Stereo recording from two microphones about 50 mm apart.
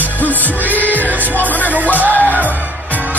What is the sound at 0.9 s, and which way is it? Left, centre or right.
Music, right.